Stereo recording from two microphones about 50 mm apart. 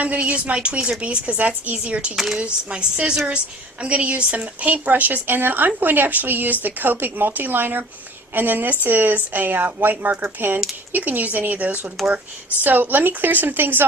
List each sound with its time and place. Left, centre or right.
0.0 s a woman's voice: right
2.1 s speech: centre
2.4 s a woman's voice: right
12.0 s speech: centre
12.6 s a woman's voice: right